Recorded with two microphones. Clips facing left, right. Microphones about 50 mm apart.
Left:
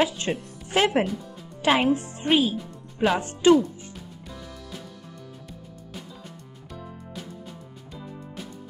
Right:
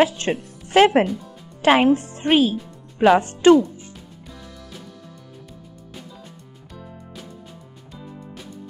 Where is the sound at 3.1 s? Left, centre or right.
Right.